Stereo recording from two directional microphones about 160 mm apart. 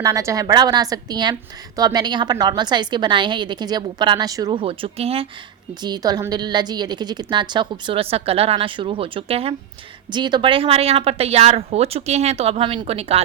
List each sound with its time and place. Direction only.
0.0 s a woman's voice: 20° right (ahead or behind)
4.6 s speech: 35° right (ahead or behind)
5.8 s a woman's voice: 25° right (ahead or behind)